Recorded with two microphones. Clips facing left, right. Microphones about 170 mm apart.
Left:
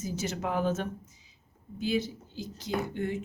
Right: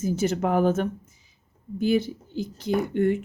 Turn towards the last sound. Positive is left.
turn(degrees=-60)  # may be behind; listen again after turning